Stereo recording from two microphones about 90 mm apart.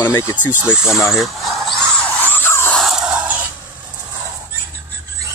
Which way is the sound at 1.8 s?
20° left (ahead or behind).